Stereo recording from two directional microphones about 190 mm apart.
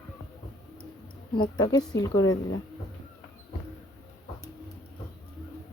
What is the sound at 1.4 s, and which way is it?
Speech, 20° left (ahead or behind).